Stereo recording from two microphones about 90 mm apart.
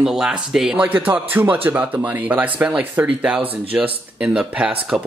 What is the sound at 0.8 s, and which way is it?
Speech, 20° right (ahead or behind).